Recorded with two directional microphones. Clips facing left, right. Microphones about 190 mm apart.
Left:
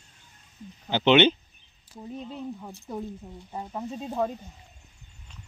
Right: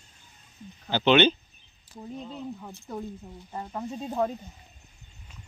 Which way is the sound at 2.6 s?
10° left (ahead or behind).